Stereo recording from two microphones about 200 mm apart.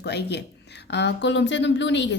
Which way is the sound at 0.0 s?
55° left (ahead or behind).